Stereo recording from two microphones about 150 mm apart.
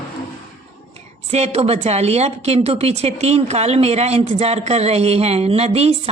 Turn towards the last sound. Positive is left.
turn(degrees=-45)  # may be behind; listen again after turning